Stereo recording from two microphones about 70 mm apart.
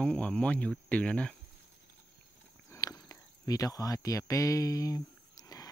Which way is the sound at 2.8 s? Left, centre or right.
Left.